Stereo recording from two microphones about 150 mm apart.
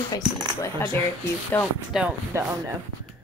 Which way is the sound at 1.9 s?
5° right (ahead or behind).